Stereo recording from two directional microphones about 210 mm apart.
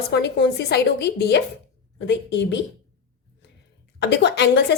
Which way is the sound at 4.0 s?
55° left (ahead or behind).